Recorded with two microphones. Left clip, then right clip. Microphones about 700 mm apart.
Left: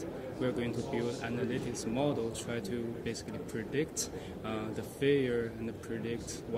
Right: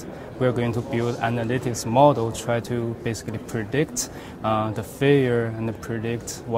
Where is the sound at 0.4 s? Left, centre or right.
Right.